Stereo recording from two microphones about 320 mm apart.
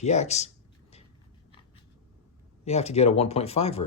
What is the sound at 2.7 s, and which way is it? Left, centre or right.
Speech, centre.